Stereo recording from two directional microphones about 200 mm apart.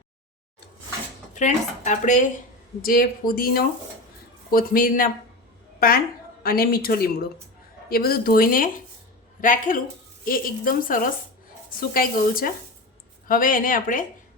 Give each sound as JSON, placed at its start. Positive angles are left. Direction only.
{"t": 1.3, "sound": "speech", "side_deg": 35}